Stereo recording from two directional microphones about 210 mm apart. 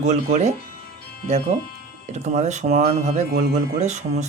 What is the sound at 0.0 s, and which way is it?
Speech, 35° right (ahead or behind).